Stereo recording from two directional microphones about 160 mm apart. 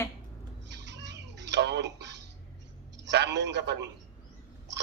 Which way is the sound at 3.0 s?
90° right.